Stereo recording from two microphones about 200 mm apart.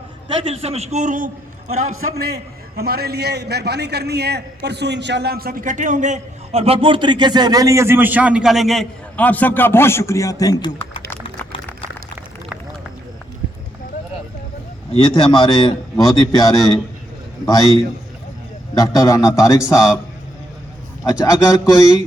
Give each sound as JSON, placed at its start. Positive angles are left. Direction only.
{"t": 0.4, "sound": "a man's voice", "side_deg": -30}
{"t": 2.2, "sound": "a man's voice", "side_deg": -50}
{"t": 15.0, "sound": "a man's voice", "side_deg": 25}
{"t": 18.7, "sound": "speech", "side_deg": 15}
{"t": 21.0, "sound": "speech", "side_deg": 15}